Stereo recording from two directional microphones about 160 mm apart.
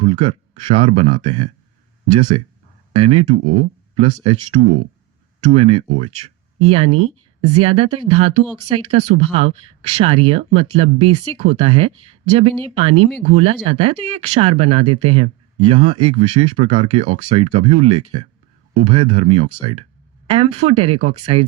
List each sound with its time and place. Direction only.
0.0 s speech: 35° right (ahead or behind)